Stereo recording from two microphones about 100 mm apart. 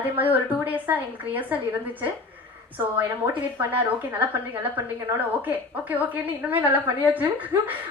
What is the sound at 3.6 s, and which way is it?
A woman's voice, 15° right (ahead or behind).